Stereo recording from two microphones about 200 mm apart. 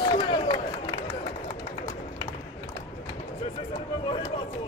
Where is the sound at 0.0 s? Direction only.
25° left (ahead or behind).